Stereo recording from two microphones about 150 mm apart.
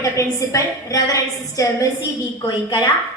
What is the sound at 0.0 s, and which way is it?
A woman's voice, 20° left (ahead or behind).